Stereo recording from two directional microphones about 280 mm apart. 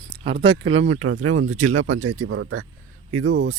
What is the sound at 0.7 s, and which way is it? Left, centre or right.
Speech, right.